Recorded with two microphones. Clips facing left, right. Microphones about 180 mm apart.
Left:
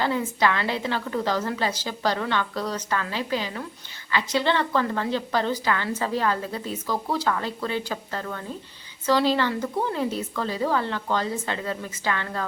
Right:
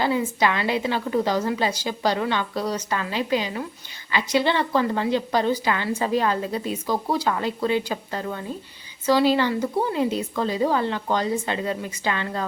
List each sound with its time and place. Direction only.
0.0 s a woman's voice: 10° right (ahead or behind)